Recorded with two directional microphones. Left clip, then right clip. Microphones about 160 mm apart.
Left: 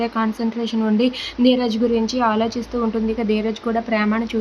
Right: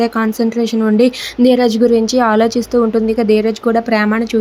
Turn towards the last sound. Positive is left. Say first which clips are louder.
# right 6 dB
turn(degrees=-35)  # may be behind; listen again after turning